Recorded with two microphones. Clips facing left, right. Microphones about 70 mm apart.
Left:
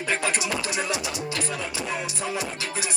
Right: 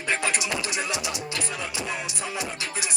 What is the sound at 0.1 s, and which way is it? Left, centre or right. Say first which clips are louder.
Music: even; left.